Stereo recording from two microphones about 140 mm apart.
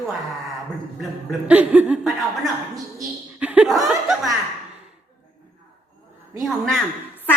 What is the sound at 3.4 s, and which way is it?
Laughter, 5° right (ahead or behind).